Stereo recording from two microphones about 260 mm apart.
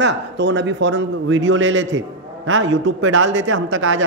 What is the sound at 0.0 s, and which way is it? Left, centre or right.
A man's voice, right.